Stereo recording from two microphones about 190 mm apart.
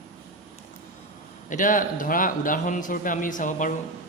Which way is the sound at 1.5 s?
45° left (ahead or behind).